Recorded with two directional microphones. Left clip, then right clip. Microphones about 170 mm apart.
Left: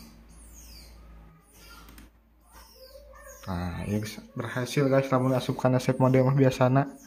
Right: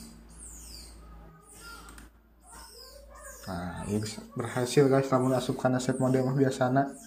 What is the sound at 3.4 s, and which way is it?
Speech, 35° left (ahead or behind).